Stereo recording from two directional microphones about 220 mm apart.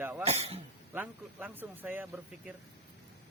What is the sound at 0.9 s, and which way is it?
Speech, 5° right (ahead or behind).